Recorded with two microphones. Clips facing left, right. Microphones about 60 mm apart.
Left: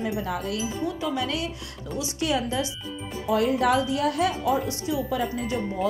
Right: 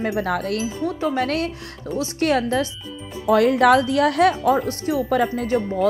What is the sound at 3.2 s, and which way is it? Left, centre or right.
Speech, right.